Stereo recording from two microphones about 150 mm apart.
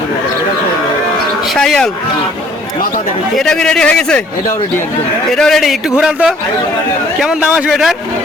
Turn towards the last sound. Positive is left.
turn(degrees=-5)  # may be behind; listen again after turning